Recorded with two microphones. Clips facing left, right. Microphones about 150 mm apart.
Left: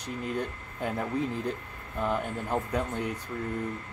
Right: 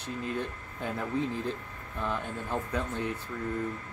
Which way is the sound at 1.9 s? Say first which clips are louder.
Left 4 dB; 15° left (ahead or behind).